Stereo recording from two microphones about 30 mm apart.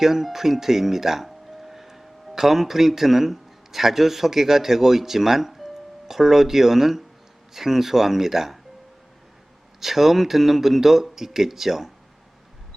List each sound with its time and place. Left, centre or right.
0.0 s speech: centre
9.8 s speech: centre